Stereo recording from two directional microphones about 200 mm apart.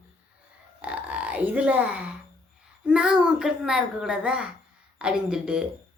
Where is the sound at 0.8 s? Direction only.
5° right (ahead or behind).